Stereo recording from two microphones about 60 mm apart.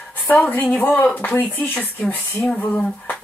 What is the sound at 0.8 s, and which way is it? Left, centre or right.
Speech, left.